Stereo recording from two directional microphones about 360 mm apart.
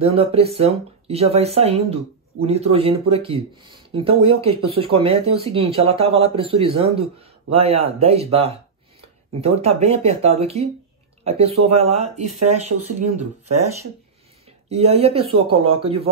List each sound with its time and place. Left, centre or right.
0.0 s speech: centre
14.7 s speech: centre